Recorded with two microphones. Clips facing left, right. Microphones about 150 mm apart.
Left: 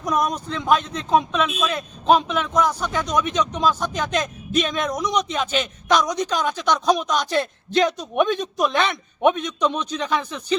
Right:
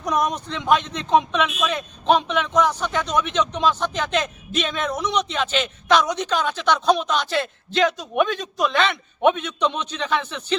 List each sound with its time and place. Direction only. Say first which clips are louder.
0.0 s a man's voice: even; 10° left (ahead or behind)